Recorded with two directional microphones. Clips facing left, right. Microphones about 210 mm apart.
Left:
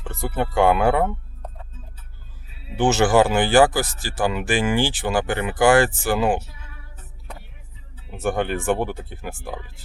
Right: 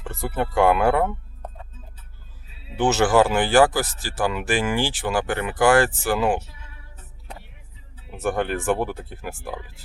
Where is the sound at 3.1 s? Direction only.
25° left (ahead or behind).